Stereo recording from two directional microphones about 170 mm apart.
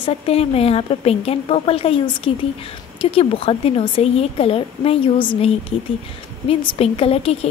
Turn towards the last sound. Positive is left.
turn(degrees=35)  # may be behind; listen again after turning